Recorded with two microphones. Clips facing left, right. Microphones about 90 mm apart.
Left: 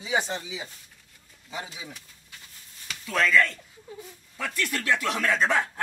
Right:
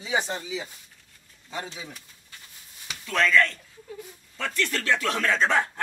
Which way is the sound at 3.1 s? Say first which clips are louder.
Right 1 dB; 5° left (ahead or behind).